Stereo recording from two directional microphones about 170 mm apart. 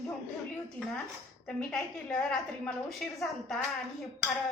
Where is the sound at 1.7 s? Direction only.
5° left (ahead or behind).